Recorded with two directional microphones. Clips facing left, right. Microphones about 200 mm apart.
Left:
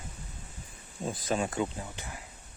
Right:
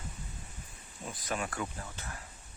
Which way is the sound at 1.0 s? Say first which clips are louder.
Left 6 dB; 30° left (ahead or behind).